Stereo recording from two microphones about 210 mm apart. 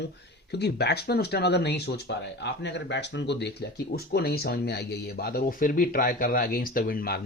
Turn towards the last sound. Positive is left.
turn(degrees=45)  # may be behind; listen again after turning